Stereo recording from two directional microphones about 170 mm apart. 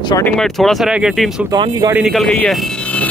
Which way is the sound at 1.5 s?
25° right (ahead or behind).